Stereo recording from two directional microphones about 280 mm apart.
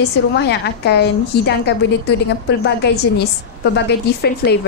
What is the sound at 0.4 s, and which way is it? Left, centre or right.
A woman's voice, left.